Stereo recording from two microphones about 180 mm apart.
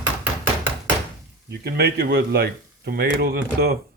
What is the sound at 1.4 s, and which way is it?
A man's voice, 60° right (ahead or behind).